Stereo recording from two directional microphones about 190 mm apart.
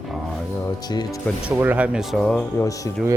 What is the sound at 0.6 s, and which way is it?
Speech, 20° left (ahead or behind).